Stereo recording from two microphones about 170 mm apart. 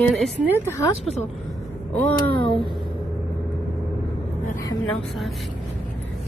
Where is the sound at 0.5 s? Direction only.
15° left (ahead or behind).